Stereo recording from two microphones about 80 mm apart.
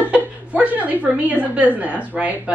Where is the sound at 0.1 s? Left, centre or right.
Centre.